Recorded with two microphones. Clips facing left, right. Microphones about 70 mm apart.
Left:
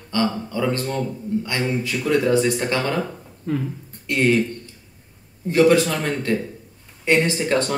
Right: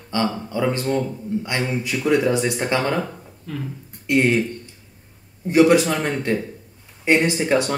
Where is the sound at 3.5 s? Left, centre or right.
Left.